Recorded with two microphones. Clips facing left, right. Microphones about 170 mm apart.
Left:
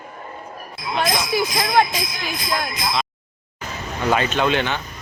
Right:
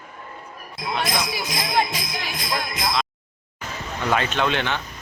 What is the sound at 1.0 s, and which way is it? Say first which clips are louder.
Speech: left 6 dB; 50° left (ahead or behind).